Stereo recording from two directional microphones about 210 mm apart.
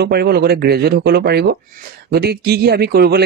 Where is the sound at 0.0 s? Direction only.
50° right (ahead or behind).